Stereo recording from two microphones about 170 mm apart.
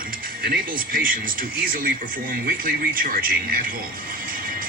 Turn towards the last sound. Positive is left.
turn(degrees=-60)  # may be behind; listen again after turning